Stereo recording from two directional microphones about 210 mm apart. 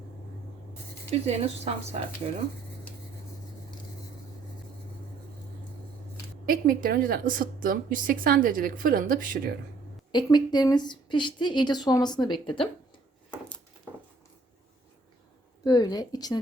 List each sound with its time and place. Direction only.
1.3 s a woman's voice: 30° right (ahead or behind)
6.4 s a woman's voice: 40° right (ahead or behind)
10.1 s a woman's voice: 20° left (ahead or behind)
15.6 s a woman's voice: 20° left (ahead or behind)